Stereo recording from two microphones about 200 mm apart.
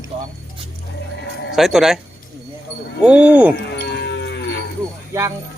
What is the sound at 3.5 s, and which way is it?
Moo, 55° left (ahead or behind).